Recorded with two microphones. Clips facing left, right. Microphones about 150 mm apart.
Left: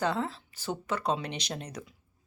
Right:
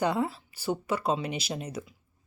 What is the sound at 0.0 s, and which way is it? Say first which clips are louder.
Speech: right 3 dB; 10° right (ahead or behind).